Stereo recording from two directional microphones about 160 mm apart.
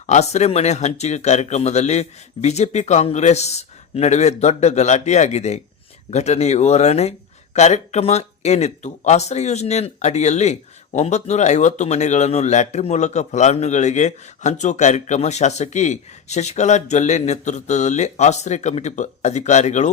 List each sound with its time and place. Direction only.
0.1 s speech: 45° left (ahead or behind)